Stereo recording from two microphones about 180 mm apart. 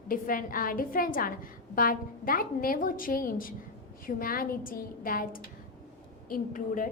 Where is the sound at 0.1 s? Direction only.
50° left (ahead or behind).